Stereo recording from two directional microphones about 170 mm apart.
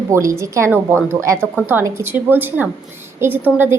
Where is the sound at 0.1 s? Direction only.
20° right (ahead or behind).